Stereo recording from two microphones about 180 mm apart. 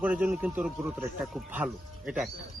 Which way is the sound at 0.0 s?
5° right (ahead or behind).